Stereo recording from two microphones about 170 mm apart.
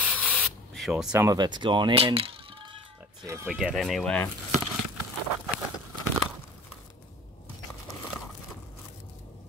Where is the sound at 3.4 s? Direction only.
Centre (ahead or behind).